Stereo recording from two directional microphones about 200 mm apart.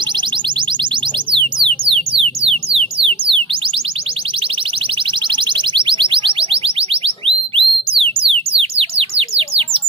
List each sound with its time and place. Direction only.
1.3 s music: 25° right (ahead or behind)
5.3 s music: 25° right (ahead or behind)
8.5 s bird: 30° right (ahead or behind)